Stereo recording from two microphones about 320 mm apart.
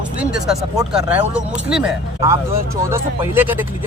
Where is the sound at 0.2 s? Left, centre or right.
Centre.